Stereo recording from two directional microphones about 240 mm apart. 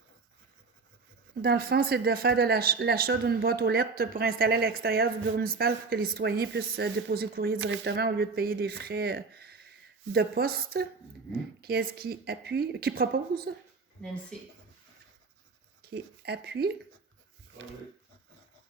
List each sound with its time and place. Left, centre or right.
1.4 s speech: right
14.3 s speech: centre
15.8 s speech: right